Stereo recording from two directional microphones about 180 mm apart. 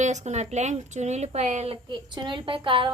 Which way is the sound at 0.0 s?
40° right (ahead or behind).